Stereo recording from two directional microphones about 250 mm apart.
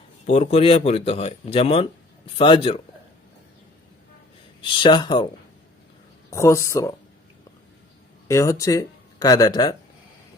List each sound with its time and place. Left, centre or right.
0.3 s speech: left
4.6 s speech: centre
6.3 s speech: centre
8.3 s speech: centre